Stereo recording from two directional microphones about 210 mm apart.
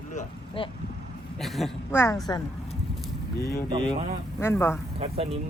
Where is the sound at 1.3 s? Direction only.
Centre (ahead or behind).